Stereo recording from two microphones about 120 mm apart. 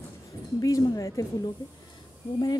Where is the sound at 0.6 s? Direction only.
30° left (ahead or behind).